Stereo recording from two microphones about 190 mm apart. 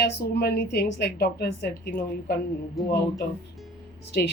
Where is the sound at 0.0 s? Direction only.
55° left (ahead or behind).